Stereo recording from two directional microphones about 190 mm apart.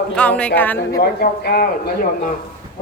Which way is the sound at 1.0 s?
55° left (ahead or behind).